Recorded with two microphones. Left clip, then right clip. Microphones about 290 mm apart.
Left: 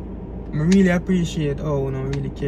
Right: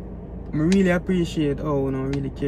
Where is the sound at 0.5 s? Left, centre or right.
Centre.